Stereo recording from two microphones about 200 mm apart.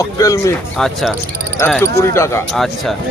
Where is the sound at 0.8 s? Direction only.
Centre (ahead or behind).